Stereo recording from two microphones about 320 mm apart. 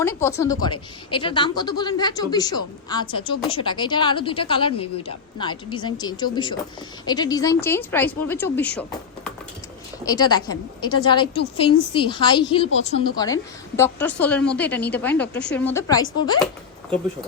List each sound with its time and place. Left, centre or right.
0.0 s a woman's voice: centre
10.0 s a woman's voice: centre
15.3 s a woman's voice: left
15.5 s a woman's voice: centre